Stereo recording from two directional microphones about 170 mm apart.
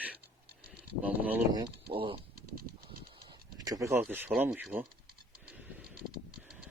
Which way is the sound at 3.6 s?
20° right (ahead or behind).